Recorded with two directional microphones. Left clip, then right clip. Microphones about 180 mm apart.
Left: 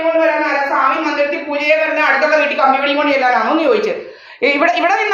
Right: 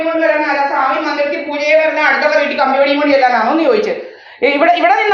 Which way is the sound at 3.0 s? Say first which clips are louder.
Right 2 dB; 30° left (ahead or behind).